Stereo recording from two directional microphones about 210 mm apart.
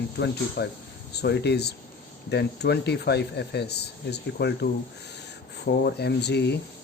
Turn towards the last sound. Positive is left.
turn(degrees=55)  # may be behind; listen again after turning